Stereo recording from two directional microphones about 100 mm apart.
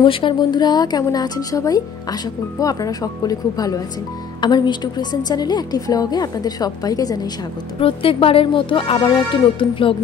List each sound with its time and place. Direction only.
0.0 s a woman's voice: 55° left (ahead or behind); by 7.2 s 40° left (ahead or behind)
7.8 s speech: 65° left (ahead or behind)